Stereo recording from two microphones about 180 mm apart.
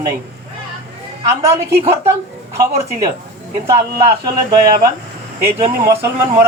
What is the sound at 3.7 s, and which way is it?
A woman's voice, 20° right (ahead or behind).